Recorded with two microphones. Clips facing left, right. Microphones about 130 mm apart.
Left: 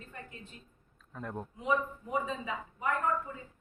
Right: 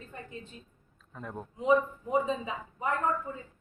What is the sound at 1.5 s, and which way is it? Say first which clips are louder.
Speech: right 7 dB; 25° right (ahead or behind).